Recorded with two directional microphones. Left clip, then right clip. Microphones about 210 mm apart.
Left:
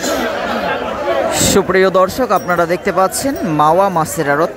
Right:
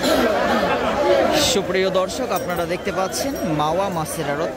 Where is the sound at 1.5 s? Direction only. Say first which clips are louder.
Left 8 dB; 25° left (ahead or behind).